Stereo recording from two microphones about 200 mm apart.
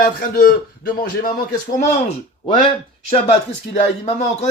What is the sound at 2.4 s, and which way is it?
Speech, 30° left (ahead or behind).